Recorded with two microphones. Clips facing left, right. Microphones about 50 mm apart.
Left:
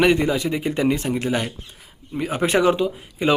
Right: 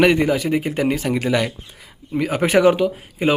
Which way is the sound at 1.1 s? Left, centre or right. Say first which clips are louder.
Right 3 dB; right.